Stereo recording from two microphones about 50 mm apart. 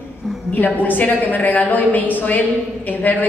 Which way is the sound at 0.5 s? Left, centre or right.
Left.